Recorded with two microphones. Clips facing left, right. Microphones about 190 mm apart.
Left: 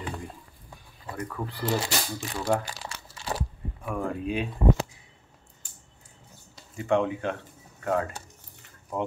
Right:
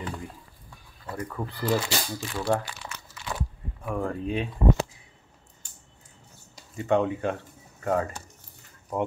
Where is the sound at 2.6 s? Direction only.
35° left (ahead or behind).